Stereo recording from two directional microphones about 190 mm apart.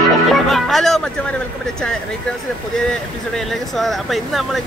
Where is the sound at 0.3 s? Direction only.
Centre (ahead or behind).